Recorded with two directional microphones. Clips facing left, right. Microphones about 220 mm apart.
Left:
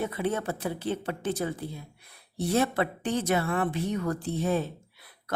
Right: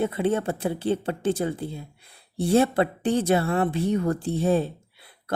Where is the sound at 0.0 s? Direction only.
25° right (ahead or behind).